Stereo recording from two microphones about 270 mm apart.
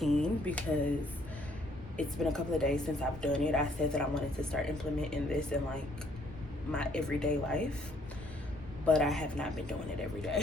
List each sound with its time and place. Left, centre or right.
0.0 s speech: centre
2.0 s a woman's voice: centre
8.9 s a woman's voice: centre